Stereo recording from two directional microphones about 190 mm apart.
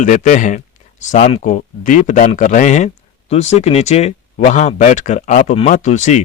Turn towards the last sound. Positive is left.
turn(degrees=40)  # may be behind; listen again after turning